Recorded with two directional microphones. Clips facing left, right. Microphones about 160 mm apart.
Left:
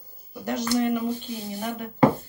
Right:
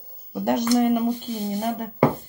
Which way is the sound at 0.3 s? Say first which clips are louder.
Right 5 dB; 60° right (ahead or behind).